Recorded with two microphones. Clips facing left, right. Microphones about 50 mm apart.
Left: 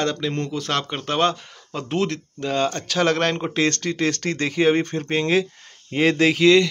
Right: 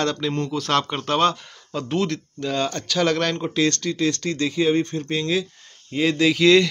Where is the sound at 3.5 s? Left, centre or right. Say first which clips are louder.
Even; left.